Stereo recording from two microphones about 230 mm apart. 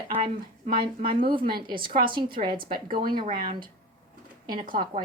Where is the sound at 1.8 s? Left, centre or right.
Right.